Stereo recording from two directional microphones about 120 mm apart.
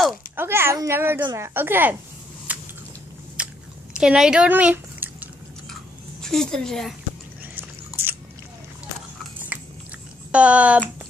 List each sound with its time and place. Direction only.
0.4 s a child's voice: 20° right (ahead or behind)
2.5 s a sound: 10° right (ahead or behind)
3.4 s biting: 10° right (ahead or behind)
4.0 s speech: 5° right (ahead or behind)
6.2 s speech: 5° left (ahead or behind)
7.5 s a sound: 15° right (ahead or behind)
9.5 s chewing: 10° right (ahead or behind)
10.3 s speech: 10° right (ahead or behind)